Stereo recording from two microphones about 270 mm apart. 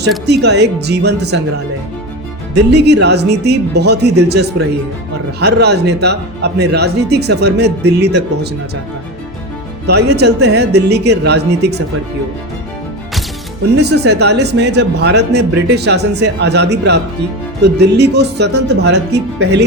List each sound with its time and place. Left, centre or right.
0.3 s speech: right
2.7 s speech: right
9.8 s speech: right
13.7 s speech: right